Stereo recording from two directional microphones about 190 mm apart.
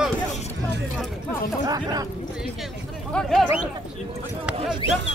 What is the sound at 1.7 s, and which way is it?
Speech, 20° right (ahead or behind).